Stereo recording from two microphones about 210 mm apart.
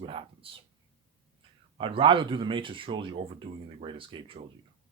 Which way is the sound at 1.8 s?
25° right (ahead or behind).